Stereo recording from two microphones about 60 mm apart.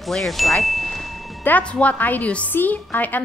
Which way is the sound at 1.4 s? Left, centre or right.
Left.